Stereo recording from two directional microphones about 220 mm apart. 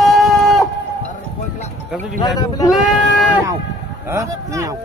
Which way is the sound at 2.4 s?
15° left (ahead or behind).